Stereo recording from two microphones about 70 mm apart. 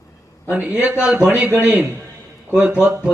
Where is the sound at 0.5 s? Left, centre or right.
Centre.